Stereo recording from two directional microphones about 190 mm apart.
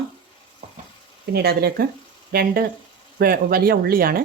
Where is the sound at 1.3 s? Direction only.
55° right (ahead or behind).